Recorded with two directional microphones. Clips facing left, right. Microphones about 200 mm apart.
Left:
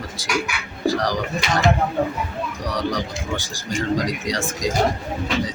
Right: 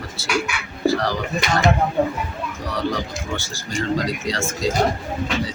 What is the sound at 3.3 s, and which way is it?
Speech, 15° left (ahead or behind).